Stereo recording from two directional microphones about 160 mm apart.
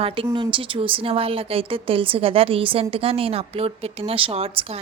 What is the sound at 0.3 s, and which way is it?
Speech, 35° right (ahead or behind).